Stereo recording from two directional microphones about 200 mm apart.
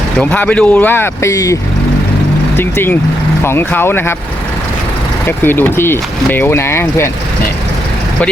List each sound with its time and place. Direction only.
0.2 s speech: 5° left (ahead or behind)
2.6 s speech: 10° left (ahead or behind)
5.2 s speech: 10° left (ahead or behind)